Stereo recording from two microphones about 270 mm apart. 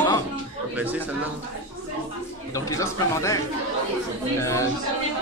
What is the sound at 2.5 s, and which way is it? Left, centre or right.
Speech, centre.